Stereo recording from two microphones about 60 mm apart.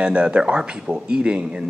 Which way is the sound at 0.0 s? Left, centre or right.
Centre.